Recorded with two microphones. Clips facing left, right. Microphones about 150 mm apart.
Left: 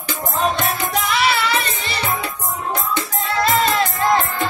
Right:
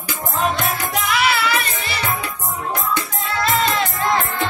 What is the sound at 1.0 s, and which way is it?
Music, 30° left (ahead or behind).